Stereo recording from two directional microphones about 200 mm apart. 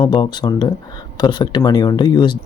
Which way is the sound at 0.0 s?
25° left (ahead or behind).